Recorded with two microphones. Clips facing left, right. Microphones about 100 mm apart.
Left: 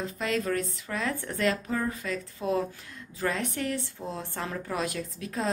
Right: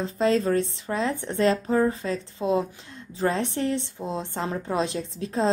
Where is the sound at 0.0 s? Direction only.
30° right (ahead or behind).